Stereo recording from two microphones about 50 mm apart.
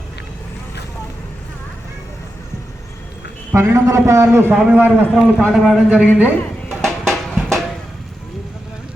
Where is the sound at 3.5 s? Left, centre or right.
Right.